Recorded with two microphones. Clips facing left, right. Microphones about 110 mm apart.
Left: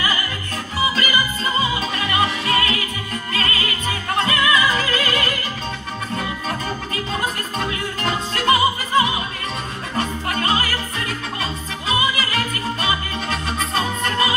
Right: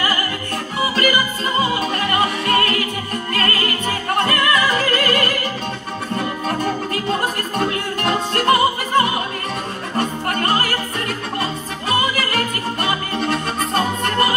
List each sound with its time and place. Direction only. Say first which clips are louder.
0.9 s music: right 3 dB; 55° right (ahead or behind)
6.6 s music: right 5 dB; 55° right (ahead or behind)
12.0 s music: right 2 dB; 55° right (ahead or behind)